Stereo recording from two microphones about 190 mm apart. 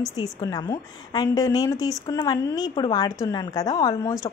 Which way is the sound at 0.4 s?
20° left (ahead or behind).